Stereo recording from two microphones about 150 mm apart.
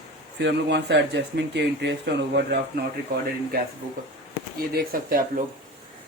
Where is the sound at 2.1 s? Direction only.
90° right.